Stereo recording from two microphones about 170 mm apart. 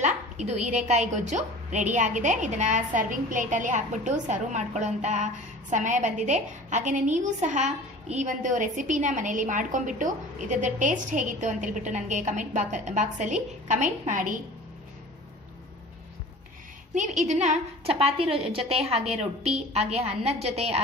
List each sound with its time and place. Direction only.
0.0 s a woman's voice: 40° right (ahead or behind)
16.9 s a woman's voice: 45° right (ahead or behind)